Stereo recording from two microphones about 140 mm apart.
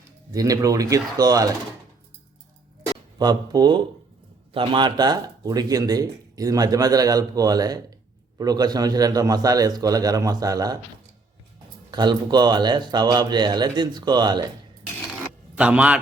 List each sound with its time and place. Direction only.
0.3 s speech: 25° right (ahead or behind)
3.2 s speech: 30° right (ahead or behind)
11.9 s a man's voice: 30° right (ahead or behind)
15.5 s speech: 10° right (ahead or behind)